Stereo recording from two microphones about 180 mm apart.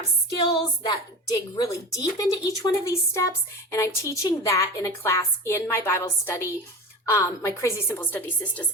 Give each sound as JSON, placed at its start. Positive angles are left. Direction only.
{"t": 0.3, "sound": "a woman's voice", "side_deg": 25}